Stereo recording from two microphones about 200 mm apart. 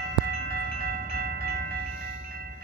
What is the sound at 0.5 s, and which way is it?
Wind chime, 50° right (ahead or behind).